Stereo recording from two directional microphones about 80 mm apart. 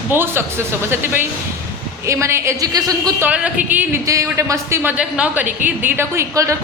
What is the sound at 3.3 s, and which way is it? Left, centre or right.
Speech, centre.